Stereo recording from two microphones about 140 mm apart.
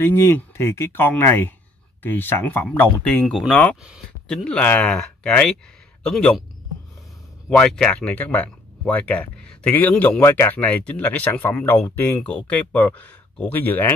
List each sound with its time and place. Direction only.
0.0 s speech: 20° left (ahead or behind)
3.8 s speech: 5° right (ahead or behind)
7.4 s speech: 5° left (ahead or behind)